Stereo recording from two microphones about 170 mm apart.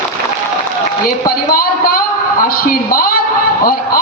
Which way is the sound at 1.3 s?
55° left (ahead or behind).